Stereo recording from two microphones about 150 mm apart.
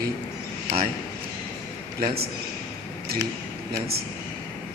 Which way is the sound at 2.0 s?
90° right.